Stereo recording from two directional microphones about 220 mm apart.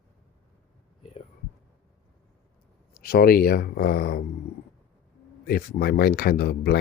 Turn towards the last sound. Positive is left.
turn(degrees=45)  # may be behind; listen again after turning